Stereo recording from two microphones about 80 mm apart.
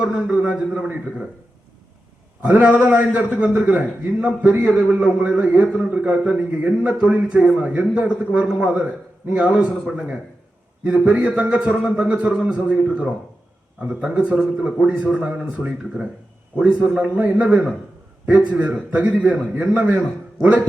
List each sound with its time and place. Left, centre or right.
0.0 s a man's voice: centre
2.4 s a man's voice: centre